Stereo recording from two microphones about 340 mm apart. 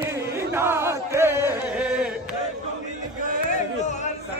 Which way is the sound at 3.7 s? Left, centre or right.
Left.